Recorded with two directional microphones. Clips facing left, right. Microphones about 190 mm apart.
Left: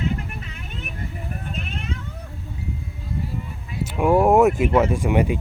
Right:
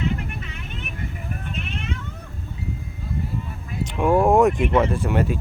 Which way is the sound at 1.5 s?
35° left (ahead or behind).